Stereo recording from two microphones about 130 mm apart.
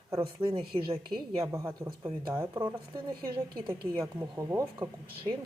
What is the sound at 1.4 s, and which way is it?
A woman's voice, 25° right (ahead or behind).